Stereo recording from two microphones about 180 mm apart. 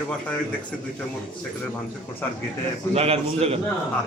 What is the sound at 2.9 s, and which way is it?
Speech, 35° right (ahead or behind).